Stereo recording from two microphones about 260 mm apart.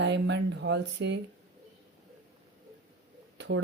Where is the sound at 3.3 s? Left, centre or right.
Right.